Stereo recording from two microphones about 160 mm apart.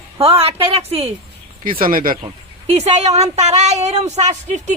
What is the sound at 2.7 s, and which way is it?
Speech, 45° right (ahead or behind).